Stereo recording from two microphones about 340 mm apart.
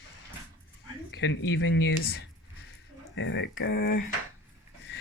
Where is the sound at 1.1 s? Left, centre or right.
Left.